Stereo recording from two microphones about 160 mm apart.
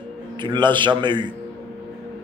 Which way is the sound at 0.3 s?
30° right (ahead or behind).